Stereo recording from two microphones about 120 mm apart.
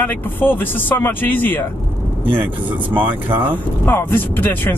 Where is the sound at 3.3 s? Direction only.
15° right (ahead or behind).